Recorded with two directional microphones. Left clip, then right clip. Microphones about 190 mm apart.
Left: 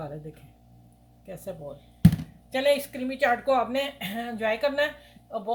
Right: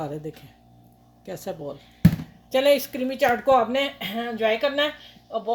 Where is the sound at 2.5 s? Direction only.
50° right (ahead or behind).